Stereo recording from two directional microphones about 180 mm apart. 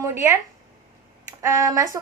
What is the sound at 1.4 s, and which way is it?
Speech, 15° right (ahead or behind).